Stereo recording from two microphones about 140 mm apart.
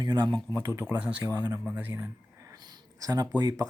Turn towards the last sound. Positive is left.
turn(degrees=-25)  # may be behind; listen again after turning